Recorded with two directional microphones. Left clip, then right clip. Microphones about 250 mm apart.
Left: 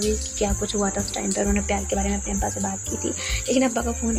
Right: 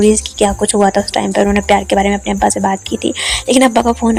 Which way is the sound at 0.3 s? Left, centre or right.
Right.